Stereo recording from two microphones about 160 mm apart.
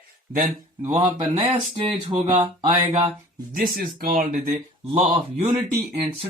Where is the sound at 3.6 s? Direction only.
60° right (ahead or behind).